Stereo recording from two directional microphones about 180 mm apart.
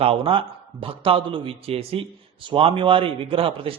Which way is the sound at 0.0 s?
30° right (ahead or behind).